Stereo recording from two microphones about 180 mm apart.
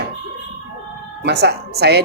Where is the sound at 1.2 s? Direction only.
65° right (ahead or behind).